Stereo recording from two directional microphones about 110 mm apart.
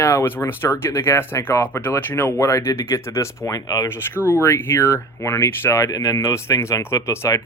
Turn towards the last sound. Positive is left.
turn(degrees=25)  # may be behind; listen again after turning